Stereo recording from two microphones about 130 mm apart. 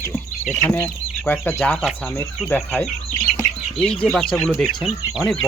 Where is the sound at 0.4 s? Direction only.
15° left (ahead or behind).